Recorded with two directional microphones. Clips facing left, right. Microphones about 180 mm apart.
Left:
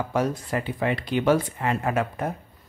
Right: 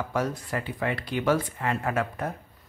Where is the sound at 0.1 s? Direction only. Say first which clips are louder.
Left 4 dB; 20° left (ahead or behind).